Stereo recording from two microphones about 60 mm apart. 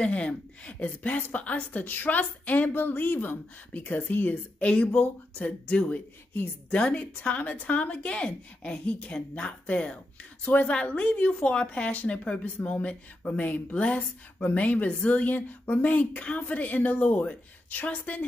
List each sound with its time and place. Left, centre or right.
0.0 s a woman's voice: centre